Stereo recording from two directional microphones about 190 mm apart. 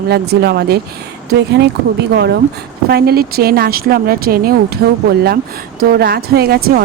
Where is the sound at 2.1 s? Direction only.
60° right (ahead or behind).